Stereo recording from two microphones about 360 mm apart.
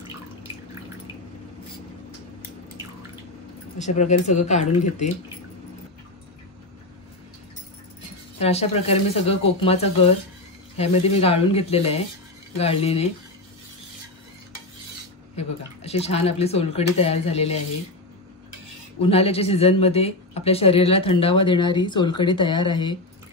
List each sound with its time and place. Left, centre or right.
3.7 s speech: centre
8.4 s speech: centre
15.3 s speech: centre
18.9 s speech: centre